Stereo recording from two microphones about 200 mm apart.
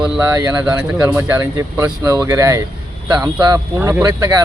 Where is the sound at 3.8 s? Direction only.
10° right (ahead or behind).